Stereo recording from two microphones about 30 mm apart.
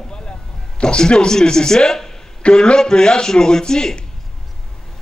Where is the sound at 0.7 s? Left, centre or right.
Left.